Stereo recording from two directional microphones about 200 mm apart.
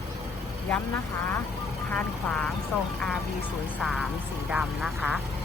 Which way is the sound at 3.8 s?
Centre (ahead or behind).